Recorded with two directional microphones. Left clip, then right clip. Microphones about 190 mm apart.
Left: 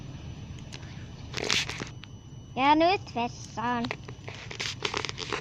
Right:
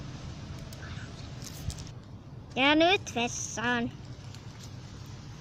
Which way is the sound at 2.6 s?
20° left (ahead or behind).